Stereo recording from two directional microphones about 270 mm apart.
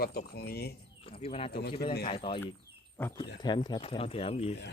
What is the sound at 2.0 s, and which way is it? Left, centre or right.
Speech, centre.